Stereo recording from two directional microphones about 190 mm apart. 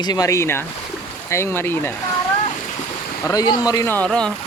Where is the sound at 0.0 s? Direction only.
20° left (ahead or behind).